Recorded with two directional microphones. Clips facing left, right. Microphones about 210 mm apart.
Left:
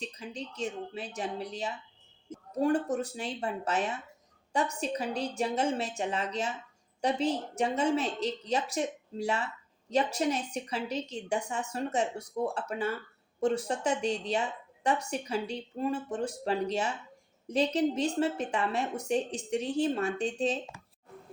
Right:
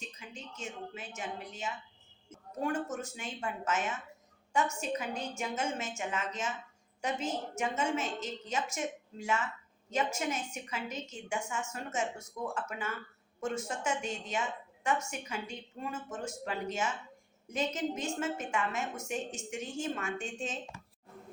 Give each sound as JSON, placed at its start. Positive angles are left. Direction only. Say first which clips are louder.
{"t": 0.0, "sound": "a woman's voice", "louder": "left 8 dB", "side_deg": 35}